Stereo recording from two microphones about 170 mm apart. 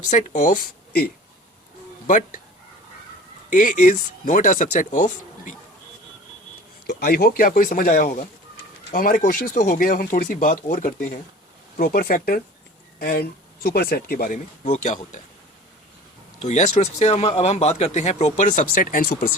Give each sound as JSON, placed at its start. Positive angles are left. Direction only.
{"t": 0.1, "sound": "speech", "side_deg": 50}
{"t": 3.5, "sound": "speech", "side_deg": 50}
{"t": 6.8, "sound": "speech", "side_deg": 65}
{"t": 16.4, "sound": "speech", "side_deg": 40}